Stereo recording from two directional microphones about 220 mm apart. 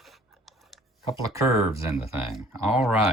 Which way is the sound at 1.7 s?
15° right (ahead or behind).